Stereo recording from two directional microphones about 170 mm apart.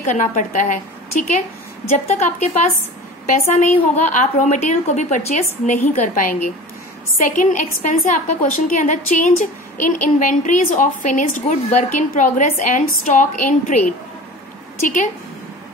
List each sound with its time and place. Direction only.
0.0 s a woman's voice: 50° left (ahead or behind)
1.9 s a woman's voice: 40° left (ahead or behind)